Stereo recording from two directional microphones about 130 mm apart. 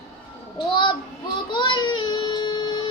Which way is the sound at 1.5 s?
35° left (ahead or behind).